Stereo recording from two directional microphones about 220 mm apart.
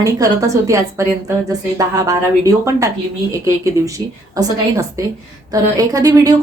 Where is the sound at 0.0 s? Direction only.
15° right (ahead or behind).